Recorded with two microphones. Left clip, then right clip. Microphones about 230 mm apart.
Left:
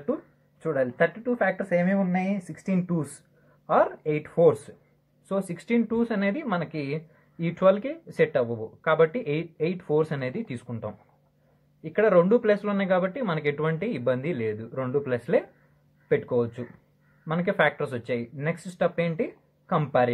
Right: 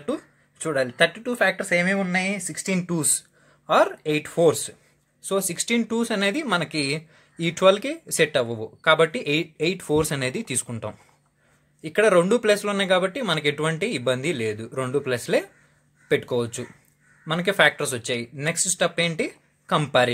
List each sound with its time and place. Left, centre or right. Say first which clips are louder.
0.0 s speech: right 1 dB; right